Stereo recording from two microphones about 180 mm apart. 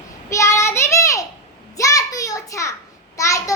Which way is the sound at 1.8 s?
20° left (ahead or behind).